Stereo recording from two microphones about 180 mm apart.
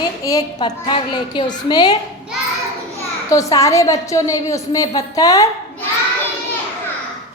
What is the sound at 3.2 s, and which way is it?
A woman's voice, 20° left (ahead or behind).